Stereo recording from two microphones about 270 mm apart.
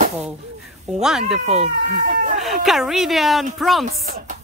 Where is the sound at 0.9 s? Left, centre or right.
Centre.